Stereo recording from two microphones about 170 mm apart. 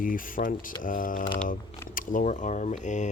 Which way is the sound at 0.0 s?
55° left (ahead or behind).